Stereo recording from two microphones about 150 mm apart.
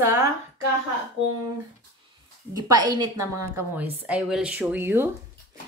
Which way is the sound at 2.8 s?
25° right (ahead or behind).